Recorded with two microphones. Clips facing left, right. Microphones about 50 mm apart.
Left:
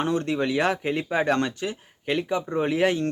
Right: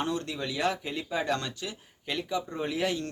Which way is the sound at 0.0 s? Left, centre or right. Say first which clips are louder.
Left 7 dB; left.